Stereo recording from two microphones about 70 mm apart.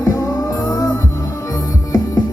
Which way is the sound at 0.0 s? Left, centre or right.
Left.